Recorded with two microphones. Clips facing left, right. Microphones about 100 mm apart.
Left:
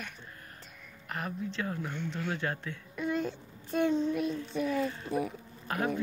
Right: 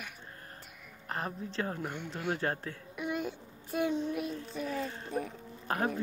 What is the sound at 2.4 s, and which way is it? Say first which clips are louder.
Speech: right 1 dB; 40° right (ahead or behind).